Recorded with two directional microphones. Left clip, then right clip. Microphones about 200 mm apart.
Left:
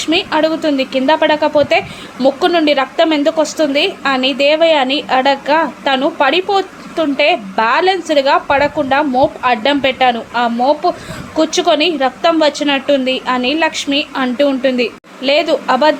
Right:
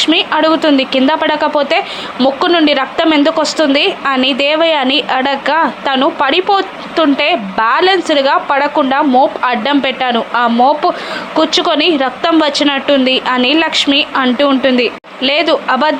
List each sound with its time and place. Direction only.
0.0 s a woman's voice: 10° right (ahead or behind)